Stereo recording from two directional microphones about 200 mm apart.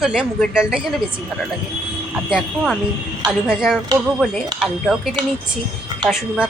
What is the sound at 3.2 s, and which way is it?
Speech, 5° right (ahead or behind).